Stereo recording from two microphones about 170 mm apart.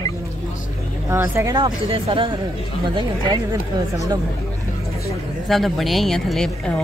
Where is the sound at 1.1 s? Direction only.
15° right (ahead or behind).